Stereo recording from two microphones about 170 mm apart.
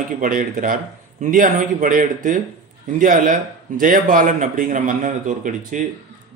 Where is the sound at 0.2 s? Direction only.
55° right (ahead or behind).